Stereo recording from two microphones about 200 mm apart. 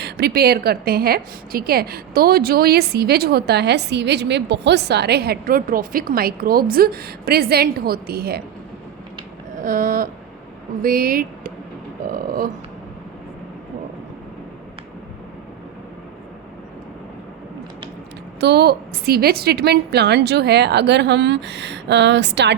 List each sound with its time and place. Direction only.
0.0 s a woman's voice: 50° right (ahead or behind)
9.6 s a woman's voice: 40° right (ahead or behind)
18.3 s a woman's voice: 55° right (ahead or behind)